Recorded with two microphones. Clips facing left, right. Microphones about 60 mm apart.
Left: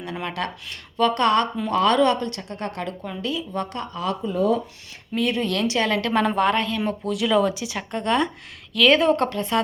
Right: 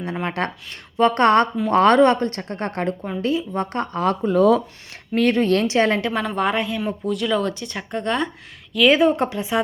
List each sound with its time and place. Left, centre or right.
0.0 s a woman's voice: right
4.3 s speech: right
5.1 s a woman's voice: right
6.1 s speech: centre